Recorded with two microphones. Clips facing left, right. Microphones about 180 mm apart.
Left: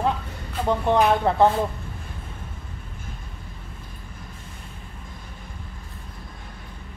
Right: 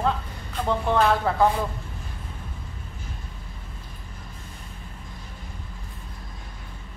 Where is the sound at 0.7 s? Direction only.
15° left (ahead or behind).